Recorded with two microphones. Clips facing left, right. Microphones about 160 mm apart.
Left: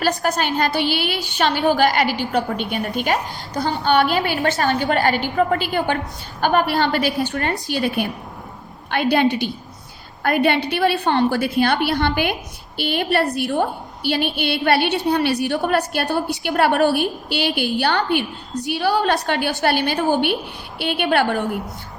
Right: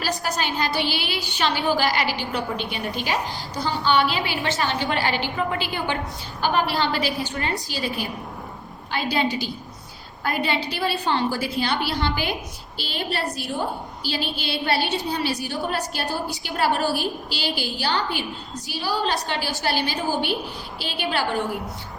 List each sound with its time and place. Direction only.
0.0 s a woman's voice: 50° left (ahead or behind)